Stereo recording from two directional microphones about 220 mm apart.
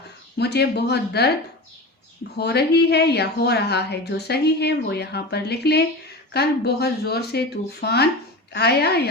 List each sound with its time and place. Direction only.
0.3 s speech: 50° left (ahead or behind)
2.3 s speech: 50° left (ahead or behind)